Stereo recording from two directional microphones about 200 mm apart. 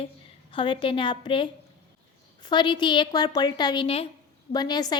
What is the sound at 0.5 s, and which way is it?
A woman's voice, 25° left (ahead or behind).